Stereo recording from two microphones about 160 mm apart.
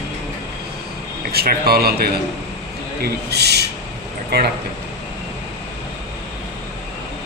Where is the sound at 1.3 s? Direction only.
75° right (ahead or behind).